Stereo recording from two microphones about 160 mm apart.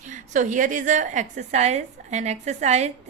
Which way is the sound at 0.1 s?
50° right (ahead or behind).